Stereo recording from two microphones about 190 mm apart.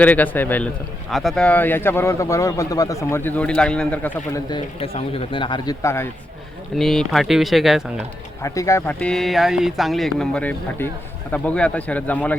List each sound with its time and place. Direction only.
0.0 s a man's voice: 10° left (ahead or behind)
4.4 s speech: 25° left (ahead or behind)
6.7 s speech: centre (ahead or behind)
8.4 s a man's voice: 15° left (ahead or behind)